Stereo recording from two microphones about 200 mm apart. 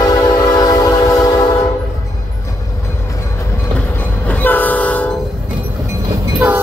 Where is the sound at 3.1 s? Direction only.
15° left (ahead or behind).